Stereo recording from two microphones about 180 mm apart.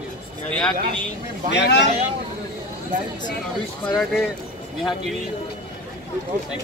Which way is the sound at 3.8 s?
5° left (ahead or behind).